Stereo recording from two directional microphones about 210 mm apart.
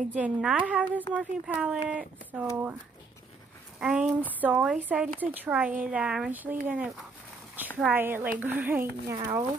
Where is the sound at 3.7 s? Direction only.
Centre (ahead or behind).